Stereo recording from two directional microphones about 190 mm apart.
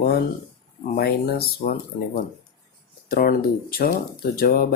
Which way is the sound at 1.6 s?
55° left (ahead or behind).